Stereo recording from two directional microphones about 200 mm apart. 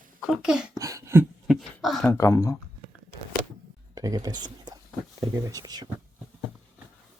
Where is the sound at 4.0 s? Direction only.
20° right (ahead or behind).